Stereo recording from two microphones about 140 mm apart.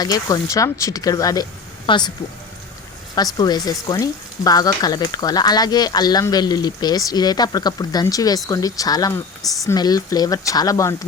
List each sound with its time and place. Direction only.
0.0 s frying: 25° left (ahead or behind)
1.9 s speech: 30° left (ahead or behind)
3.3 s frying: 30° left (ahead or behind)